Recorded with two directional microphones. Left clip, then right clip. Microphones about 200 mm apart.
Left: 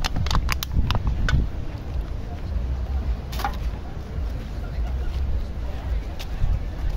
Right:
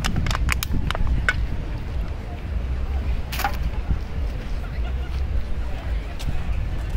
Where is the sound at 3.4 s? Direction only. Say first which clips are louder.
Right 2 dB; 15° right (ahead or behind).